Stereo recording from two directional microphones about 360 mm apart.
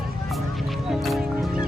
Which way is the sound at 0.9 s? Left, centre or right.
Centre.